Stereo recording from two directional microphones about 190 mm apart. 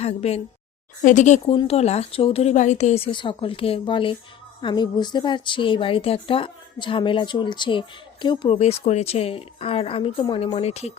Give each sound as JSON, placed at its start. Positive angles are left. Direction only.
{"t": 0.0, "sound": "a woman's voice", "side_deg": 35}